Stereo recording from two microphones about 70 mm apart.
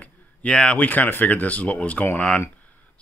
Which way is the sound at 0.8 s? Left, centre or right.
Left.